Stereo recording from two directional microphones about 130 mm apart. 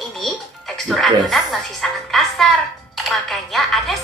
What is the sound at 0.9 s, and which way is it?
A woman's voice, centre (ahead or behind).